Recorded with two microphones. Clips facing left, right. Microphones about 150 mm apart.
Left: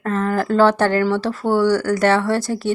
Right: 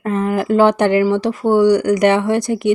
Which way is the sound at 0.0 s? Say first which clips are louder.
Right 2 dB; 15° right (ahead or behind).